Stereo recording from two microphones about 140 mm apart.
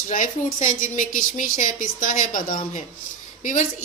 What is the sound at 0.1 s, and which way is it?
Speech, 70° left (ahead or behind).